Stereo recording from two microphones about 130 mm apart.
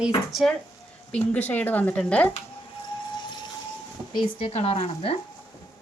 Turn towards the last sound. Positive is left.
turn(degrees=50)  # may be behind; listen again after turning